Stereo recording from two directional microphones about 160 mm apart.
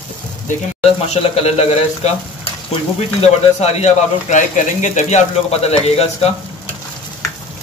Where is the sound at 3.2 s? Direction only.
40° left (ahead or behind).